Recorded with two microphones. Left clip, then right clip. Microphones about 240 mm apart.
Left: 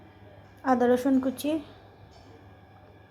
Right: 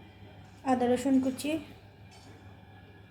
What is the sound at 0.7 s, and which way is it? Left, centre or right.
Speech, left.